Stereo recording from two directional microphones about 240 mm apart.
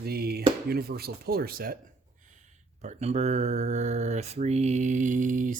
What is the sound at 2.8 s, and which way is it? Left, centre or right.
Speech, right.